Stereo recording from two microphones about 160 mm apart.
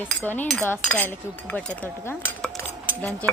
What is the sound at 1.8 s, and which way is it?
Cutlery, 10° left (ahead or behind).